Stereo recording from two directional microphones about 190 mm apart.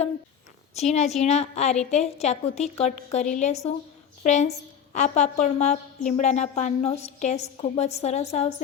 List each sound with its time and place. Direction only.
0.7 s a woman's voice: 35° left (ahead or behind)